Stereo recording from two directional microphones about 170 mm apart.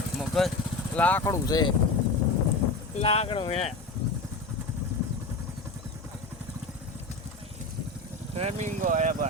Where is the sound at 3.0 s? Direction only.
35° left (ahead or behind).